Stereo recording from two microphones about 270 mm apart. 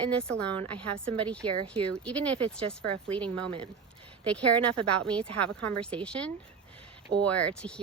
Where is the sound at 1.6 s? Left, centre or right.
Centre.